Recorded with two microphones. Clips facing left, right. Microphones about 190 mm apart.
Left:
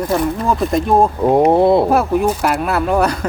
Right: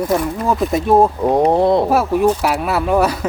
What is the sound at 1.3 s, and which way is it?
Speech, 10° left (ahead or behind).